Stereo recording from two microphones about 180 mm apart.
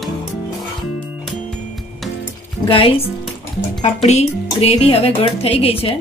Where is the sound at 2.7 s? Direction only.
30° left (ahead or behind).